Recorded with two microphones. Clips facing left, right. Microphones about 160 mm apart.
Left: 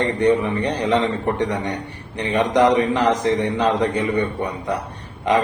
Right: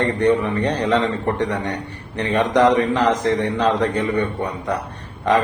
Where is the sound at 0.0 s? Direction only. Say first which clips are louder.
Even; 15° left (ahead or behind).